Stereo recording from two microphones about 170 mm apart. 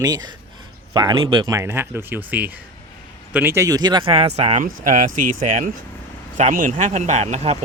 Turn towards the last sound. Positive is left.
turn(degrees=-40)  # may be behind; listen again after turning